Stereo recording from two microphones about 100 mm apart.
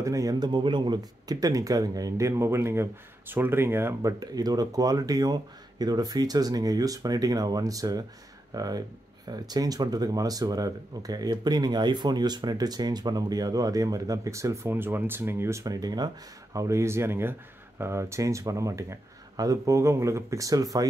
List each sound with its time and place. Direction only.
0.0 s speech: 35° right (ahead or behind)
4.2 s speech: 40° right (ahead or behind)